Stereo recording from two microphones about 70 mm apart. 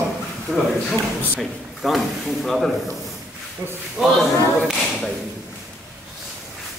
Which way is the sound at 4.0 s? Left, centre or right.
Centre.